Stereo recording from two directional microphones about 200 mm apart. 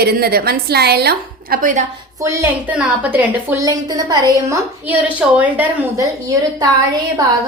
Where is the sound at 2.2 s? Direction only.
15° right (ahead or behind).